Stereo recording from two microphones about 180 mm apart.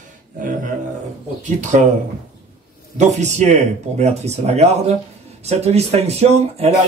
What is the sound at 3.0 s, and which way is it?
Speech, 40° right (ahead or behind).